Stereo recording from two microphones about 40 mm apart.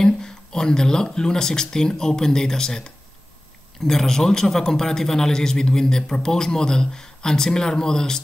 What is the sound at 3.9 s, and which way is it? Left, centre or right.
A man's voice, centre.